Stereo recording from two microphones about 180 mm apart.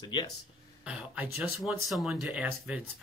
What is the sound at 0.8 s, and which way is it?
Speech, 5° right (ahead or behind).